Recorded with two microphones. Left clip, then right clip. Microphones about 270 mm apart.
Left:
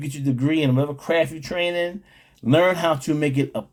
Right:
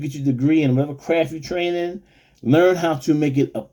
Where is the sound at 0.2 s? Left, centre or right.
Centre.